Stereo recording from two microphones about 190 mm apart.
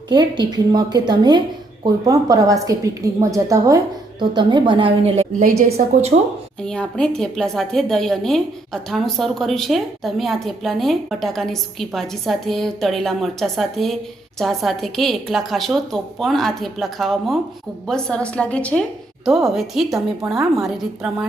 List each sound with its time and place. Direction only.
0.1 s a woman's voice: 20° right (ahead or behind)
6.7 s a woman's voice: 5° left (ahead or behind)